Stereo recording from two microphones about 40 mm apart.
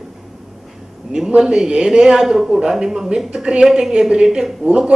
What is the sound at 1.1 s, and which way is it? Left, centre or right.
Speech, centre.